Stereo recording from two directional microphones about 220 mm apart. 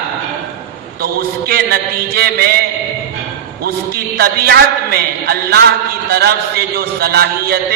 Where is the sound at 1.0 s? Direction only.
45° right (ahead or behind).